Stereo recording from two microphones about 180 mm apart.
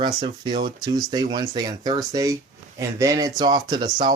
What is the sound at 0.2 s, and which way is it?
Speech, 25° right (ahead or behind).